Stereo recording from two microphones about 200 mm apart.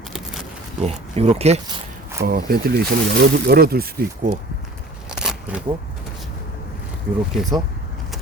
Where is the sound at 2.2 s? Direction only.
50° right (ahead or behind).